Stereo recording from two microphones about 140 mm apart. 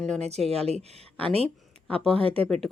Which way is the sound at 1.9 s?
5° left (ahead or behind).